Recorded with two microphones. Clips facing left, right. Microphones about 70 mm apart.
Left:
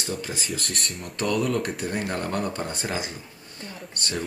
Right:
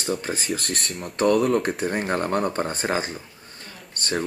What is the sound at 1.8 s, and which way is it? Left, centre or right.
Speech, right.